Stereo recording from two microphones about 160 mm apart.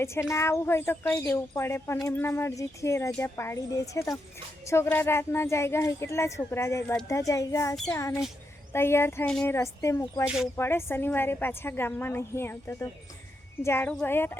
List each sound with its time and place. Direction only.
0.0 s a child's voice: 15° left (ahead or behind)
10.2 s speech: centre (ahead or behind)
10.6 s speech: 15° left (ahead or behind)